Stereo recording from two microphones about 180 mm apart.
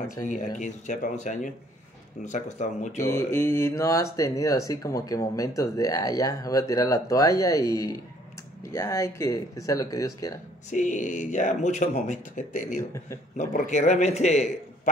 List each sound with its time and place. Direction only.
0.3 s a man's voice: 45° left (ahead or behind)
3.0 s speech: 15° left (ahead or behind)
10.7 s a man's voice: 45° left (ahead or behind)